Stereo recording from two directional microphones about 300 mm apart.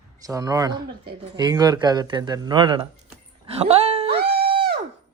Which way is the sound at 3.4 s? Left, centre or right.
Centre.